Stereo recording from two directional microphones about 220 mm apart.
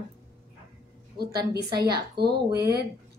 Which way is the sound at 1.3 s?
45° right (ahead or behind).